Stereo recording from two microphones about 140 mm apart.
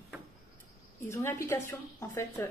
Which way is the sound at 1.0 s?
20° left (ahead or behind).